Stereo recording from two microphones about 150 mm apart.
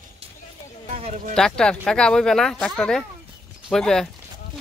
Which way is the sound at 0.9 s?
45° right (ahead or behind).